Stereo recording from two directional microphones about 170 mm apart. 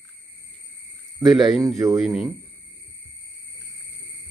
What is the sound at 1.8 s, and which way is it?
Speech, 15° right (ahead or behind).